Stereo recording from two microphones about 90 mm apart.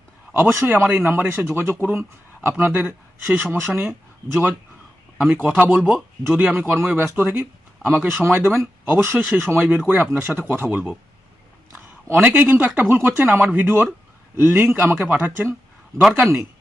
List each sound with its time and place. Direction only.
0.3 s speech: 20° right (ahead or behind)
12.0 s speech: 20° right (ahead or behind)
16.0 s a man's voice: centre (ahead or behind)